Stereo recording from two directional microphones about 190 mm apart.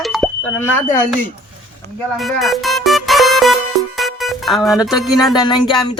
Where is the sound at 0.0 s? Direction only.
Centre (ahead or behind).